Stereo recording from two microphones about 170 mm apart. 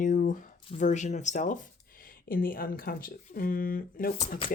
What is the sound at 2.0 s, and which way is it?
Speech, 55° left (ahead or behind).